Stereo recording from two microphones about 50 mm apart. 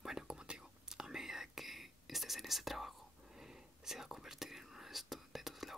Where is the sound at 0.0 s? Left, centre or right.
Centre.